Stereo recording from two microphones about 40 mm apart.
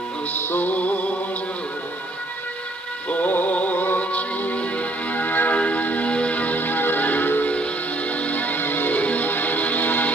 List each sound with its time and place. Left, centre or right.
0.6 s music: left
3.1 s synthetic singing: left
4.1 s music: left
5.5 s music: left
8.1 s music: left